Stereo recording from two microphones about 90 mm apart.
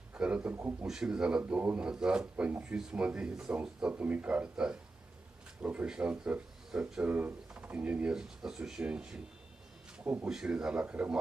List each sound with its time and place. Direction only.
0.1 s speech: 15° right (ahead or behind)
0.9 s speech: 5° right (ahead or behind)
10.2 s speech: 5° right (ahead or behind)